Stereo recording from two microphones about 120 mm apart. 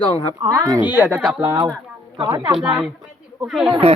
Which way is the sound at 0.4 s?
35° right (ahead or behind).